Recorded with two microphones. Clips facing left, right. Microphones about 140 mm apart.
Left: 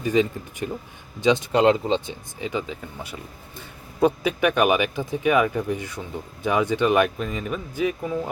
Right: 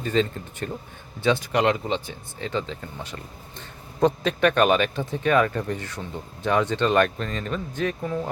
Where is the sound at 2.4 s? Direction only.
10° left (ahead or behind).